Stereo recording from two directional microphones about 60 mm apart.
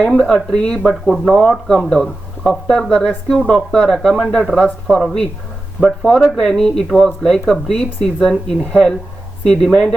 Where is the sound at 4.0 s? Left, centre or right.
Centre.